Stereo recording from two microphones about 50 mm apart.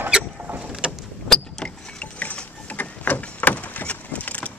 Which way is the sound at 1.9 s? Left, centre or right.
Left.